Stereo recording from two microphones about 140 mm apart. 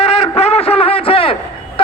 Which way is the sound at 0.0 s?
45° left (ahead or behind).